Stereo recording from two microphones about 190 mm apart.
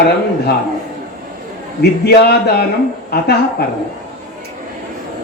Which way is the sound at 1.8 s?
60° left (ahead or behind).